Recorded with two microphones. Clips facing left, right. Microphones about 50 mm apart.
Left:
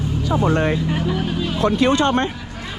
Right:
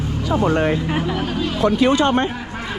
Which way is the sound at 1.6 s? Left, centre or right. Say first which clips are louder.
Right 1 dB; left.